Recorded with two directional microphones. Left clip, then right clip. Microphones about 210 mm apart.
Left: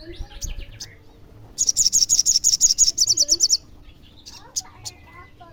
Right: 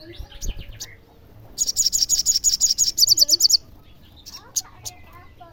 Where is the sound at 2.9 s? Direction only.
Centre (ahead or behind).